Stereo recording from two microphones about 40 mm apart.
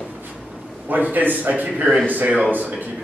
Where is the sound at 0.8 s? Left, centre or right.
Right.